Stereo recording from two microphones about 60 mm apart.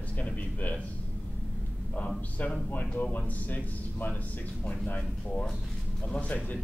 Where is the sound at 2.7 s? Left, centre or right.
Left.